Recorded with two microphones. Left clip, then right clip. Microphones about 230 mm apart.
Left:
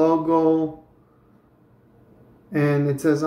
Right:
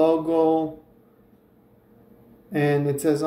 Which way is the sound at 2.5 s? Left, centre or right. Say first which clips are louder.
Left 1 dB; centre.